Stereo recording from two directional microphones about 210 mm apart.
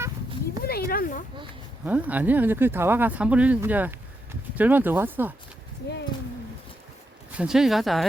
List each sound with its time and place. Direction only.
0.6 s a sound: 45° left (ahead or behind)
1.8 s speech: 5° right (ahead or behind)
7.3 s speech: 5° right (ahead or behind)